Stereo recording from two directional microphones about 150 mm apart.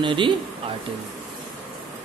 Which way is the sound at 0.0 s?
35° right (ahead or behind).